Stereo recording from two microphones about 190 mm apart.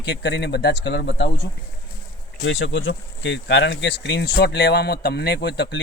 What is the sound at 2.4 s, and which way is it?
Speech, 90° left.